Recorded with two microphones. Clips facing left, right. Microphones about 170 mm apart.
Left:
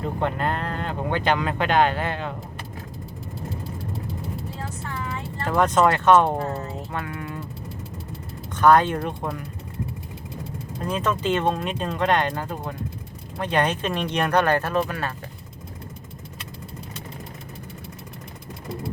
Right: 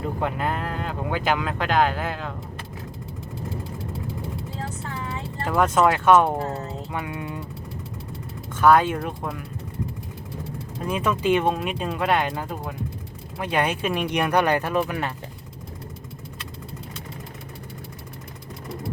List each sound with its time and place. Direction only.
0.0 s speech: 5° right (ahead or behind)
5.5 s speech: 5° right (ahead or behind)
7.0 s speech: 15° right (ahead or behind)
8.5 s speech: 5° right (ahead or behind)
10.8 s speech: 10° right (ahead or behind)